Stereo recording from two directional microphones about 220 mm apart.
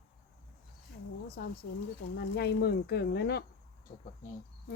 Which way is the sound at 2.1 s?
45° left (ahead or behind).